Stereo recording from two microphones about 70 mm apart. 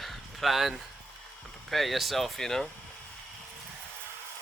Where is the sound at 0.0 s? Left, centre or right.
Centre.